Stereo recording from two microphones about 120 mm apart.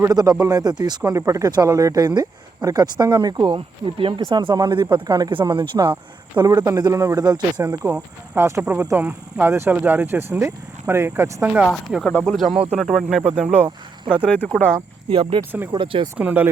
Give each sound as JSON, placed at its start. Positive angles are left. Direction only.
{"t": 0.0, "sound": "speech", "side_deg": -30}
{"t": 9.0, "sound": "speech", "side_deg": -15}
{"t": 11.6, "sound": "speech", "side_deg": 0}
{"t": 13.7, "sound": "speech", "side_deg": -40}
{"t": 14.3, "sound": "speech", "side_deg": 10}
{"t": 15.1, "sound": "speech", "side_deg": -45}
{"t": 16.1, "sound": "speech", "side_deg": -10}